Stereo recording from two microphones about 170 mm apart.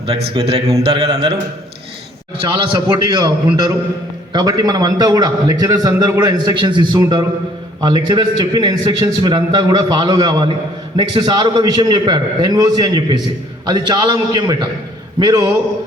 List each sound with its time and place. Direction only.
0.0 s a man's voice: 35° right (ahead or behind)
2.4 s a man's voice: 30° right (ahead or behind)